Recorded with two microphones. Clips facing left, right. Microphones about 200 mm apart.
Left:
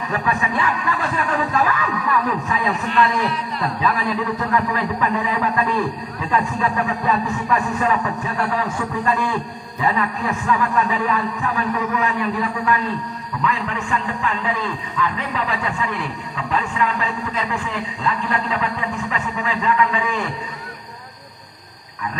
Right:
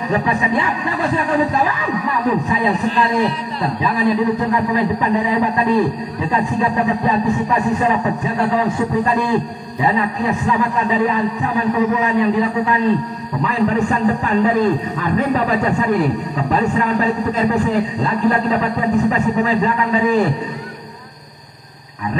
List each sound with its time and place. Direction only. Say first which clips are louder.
0.1 s a man's voice: right 5 dB; 20° right (ahead or behind); by 20.2 s 35° right (ahead or behind)